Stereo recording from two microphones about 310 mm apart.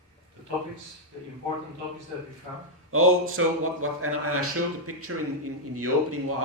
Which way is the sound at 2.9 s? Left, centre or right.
Right.